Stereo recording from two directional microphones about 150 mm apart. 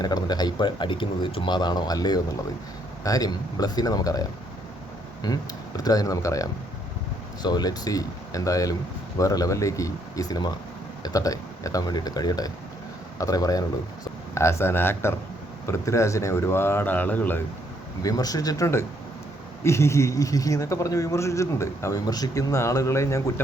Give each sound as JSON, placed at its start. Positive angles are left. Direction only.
{"t": 0.0, "sound": "a man's voice", "side_deg": 25}
{"t": 18.0, "sound": "a man's voice", "side_deg": 25}